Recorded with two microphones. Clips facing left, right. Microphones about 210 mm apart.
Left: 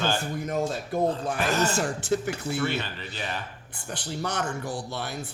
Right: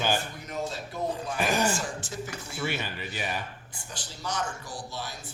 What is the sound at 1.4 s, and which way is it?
Speech, 15° right (ahead or behind).